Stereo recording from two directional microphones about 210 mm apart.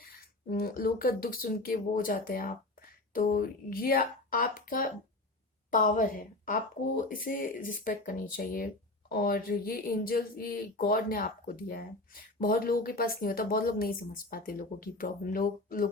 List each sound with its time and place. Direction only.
0.0 s speech: 45° left (ahead or behind)